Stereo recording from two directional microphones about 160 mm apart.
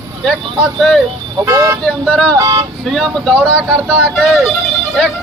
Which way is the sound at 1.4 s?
20° right (ahead or behind).